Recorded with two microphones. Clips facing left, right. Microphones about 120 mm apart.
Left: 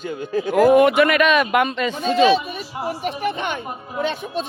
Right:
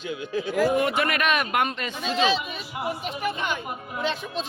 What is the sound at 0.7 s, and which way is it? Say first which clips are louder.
A man's voice: left 10 dB; 75° left (ahead or behind).